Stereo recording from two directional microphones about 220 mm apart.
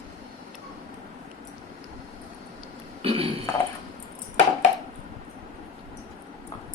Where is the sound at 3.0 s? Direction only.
25° right (ahead or behind).